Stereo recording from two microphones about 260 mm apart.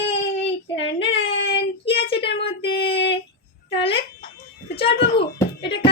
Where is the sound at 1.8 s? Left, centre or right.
Left.